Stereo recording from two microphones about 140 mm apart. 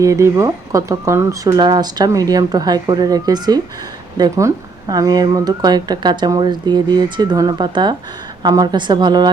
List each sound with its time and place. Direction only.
0.0 s a woman's voice: 20° right (ahead or behind)